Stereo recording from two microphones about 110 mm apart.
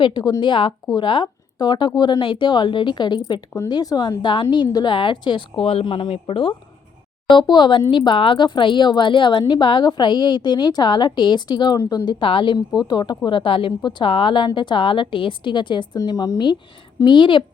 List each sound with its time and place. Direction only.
0.0 s a woman's voice: 40° left (ahead or behind); by 6.5 s 60° left (ahead or behind)
7.3 s a woman's voice: 45° left (ahead or behind)
16.0 s a woman's voice: 35° left (ahead or behind)